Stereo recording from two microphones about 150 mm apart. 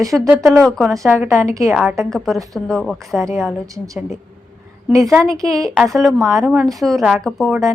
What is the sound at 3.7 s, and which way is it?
Speech, 20° right (ahead or behind).